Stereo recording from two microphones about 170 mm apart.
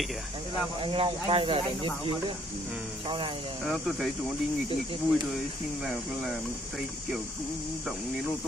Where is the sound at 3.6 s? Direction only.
Centre (ahead or behind).